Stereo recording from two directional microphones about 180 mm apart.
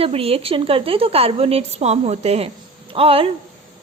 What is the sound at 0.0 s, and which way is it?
A woman's voice, 35° right (ahead or behind).